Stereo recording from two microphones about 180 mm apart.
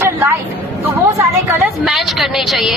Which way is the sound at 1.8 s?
Centre (ahead or behind).